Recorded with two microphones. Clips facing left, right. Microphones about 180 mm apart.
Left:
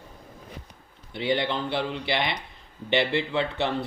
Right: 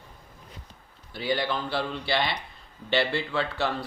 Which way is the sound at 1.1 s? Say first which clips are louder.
Left 2 dB; 20° left (ahead or behind).